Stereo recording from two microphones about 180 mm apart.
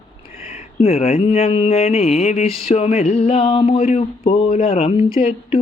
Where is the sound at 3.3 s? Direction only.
30° left (ahead or behind).